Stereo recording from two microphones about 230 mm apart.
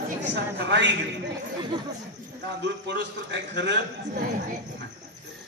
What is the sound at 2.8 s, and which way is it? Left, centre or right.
A man's voice, right.